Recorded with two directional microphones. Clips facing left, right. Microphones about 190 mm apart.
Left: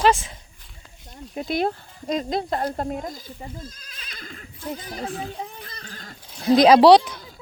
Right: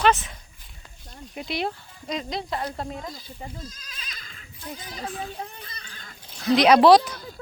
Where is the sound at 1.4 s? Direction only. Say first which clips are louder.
Left 5 dB; 45° left (ahead or behind).